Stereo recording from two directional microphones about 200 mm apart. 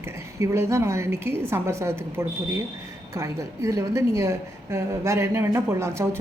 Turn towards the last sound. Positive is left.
turn(degrees=-15)  # may be behind; listen again after turning